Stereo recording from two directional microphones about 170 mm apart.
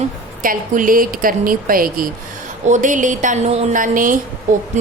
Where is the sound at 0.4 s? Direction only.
55° right (ahead or behind).